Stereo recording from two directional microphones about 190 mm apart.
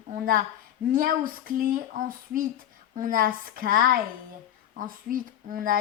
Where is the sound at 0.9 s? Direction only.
45° right (ahead or behind).